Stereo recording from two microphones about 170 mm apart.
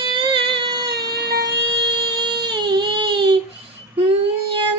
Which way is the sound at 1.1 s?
70° right (ahead or behind).